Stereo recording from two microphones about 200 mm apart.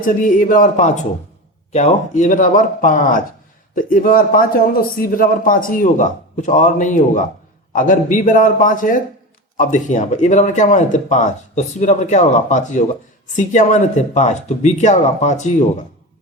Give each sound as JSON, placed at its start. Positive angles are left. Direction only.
{"t": 0.0, "sound": "a man's voice", "side_deg": 45}